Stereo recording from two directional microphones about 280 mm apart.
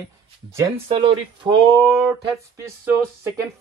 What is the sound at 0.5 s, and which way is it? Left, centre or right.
Speech, centre.